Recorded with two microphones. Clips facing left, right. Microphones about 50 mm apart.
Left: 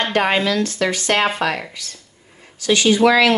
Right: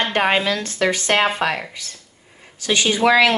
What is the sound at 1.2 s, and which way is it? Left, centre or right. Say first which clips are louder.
Speech: even; centre.